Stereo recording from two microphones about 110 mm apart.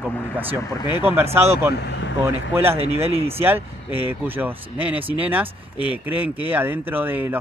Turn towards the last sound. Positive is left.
turn(degrees=-20)  # may be behind; listen again after turning